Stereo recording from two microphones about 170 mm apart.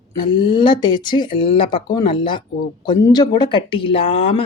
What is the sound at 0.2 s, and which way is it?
A woman's voice, 30° left (ahead or behind).